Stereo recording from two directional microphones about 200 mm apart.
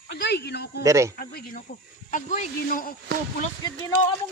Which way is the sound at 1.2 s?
45° left (ahead or behind).